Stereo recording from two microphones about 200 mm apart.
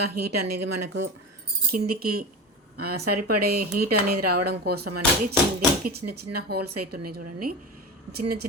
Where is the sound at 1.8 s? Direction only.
90° right.